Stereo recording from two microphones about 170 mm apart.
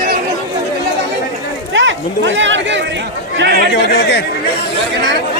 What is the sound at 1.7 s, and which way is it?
Chatter, 90° right.